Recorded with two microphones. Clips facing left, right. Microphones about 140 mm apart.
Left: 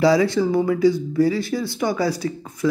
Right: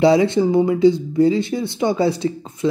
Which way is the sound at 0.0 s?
25° right (ahead or behind).